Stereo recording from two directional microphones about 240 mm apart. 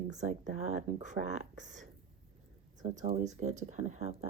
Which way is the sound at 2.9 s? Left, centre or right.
Right.